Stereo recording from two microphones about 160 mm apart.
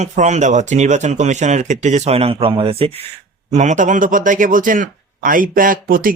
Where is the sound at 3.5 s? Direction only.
50° right (ahead or behind).